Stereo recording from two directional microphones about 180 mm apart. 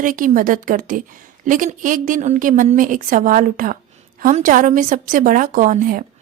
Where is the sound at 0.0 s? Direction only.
50° right (ahead or behind).